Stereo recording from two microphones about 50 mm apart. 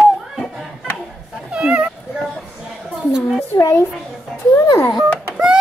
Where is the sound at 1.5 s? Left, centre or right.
Right.